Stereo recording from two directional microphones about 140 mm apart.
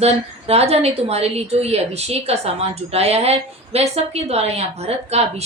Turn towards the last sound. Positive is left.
turn(degrees=-50)  # may be behind; listen again after turning